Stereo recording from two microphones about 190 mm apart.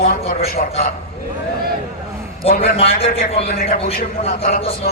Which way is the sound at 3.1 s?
55° left (ahead or behind).